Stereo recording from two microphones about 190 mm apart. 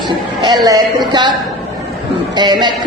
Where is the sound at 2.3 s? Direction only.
25° right (ahead or behind).